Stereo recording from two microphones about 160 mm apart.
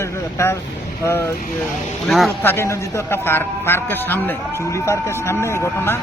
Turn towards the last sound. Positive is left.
turn(degrees=15)  # may be behind; listen again after turning